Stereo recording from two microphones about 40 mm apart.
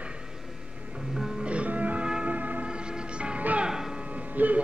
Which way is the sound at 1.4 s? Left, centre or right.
Right.